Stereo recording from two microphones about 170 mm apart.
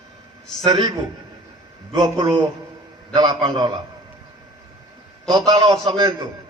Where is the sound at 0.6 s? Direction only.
25° right (ahead or behind).